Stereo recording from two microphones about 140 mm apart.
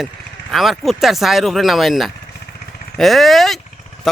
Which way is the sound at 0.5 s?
Centre (ahead or behind).